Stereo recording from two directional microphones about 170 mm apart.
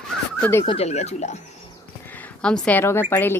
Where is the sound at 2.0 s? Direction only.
10° left (ahead or behind).